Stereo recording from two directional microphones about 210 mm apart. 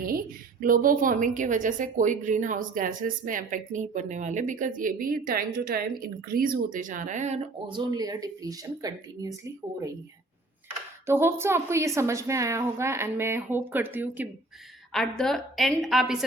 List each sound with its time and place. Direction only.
0.6 s a woman's voice: 40° right (ahead or behind)
7.7 s a woman's voice: 20° right (ahead or behind)
11.0 s a woman's voice: 10° right (ahead or behind)